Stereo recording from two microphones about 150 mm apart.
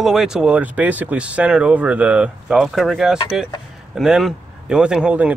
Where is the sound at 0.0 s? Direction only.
5° right (ahead or behind).